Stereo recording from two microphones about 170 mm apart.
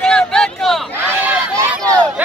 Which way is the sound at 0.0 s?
5° left (ahead or behind).